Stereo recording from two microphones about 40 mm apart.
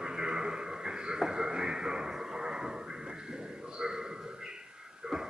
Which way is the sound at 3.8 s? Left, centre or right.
Centre.